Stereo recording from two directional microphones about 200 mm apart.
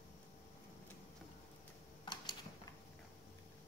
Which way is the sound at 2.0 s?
20° left (ahead or behind).